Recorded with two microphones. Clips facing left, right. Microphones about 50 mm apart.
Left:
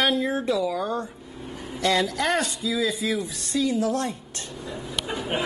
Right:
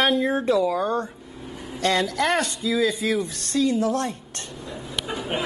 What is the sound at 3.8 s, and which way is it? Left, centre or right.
Speech, right.